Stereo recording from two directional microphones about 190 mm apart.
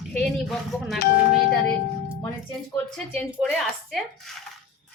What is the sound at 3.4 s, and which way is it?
Speech, 5° left (ahead or behind).